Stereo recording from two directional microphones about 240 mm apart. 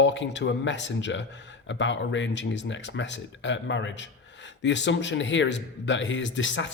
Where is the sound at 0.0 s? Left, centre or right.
Left.